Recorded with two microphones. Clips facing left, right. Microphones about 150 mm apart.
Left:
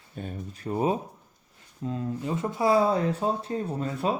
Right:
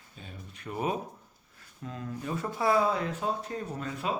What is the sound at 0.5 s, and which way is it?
Speech, 30° left (ahead or behind).